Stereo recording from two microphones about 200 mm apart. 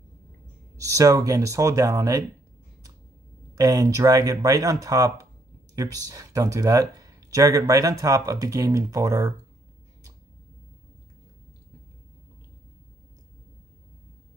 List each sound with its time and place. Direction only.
0.7 s speech: 15° right (ahead or behind)
3.5 s speech: 20° right (ahead or behind)